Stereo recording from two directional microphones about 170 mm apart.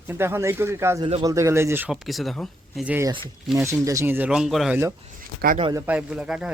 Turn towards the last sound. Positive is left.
turn(degrees=-5)  # may be behind; listen again after turning